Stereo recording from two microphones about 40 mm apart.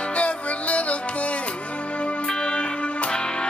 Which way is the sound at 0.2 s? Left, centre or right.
Left.